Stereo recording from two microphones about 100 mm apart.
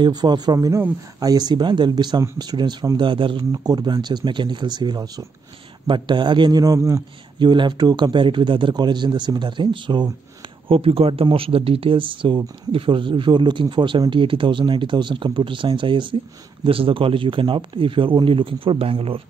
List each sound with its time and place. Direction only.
0.0 s speech: 45° right (ahead or behind)
5.9 s speech: 50° right (ahead or behind); by 7.0 s 35° right (ahead or behind)
7.3 s speech: 50° right (ahead or behind)
10.7 s speech: 70° right (ahead or behind)